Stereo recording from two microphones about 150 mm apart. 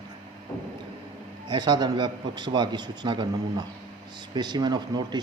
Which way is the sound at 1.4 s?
30° right (ahead or behind).